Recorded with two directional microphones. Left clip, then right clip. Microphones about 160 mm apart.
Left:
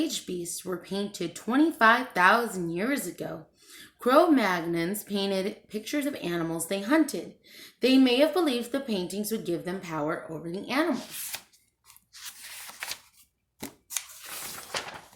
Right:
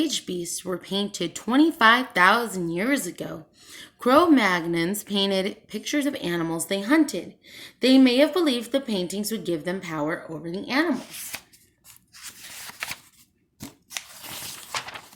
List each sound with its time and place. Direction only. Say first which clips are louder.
0.0 s speech: right 4 dB; 30° right (ahead or behind)
12.1 s scissors: right 2 dB; 10° right (ahead or behind)